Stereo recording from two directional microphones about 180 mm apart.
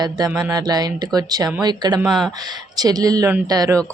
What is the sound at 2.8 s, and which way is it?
Speech, 20° right (ahead or behind).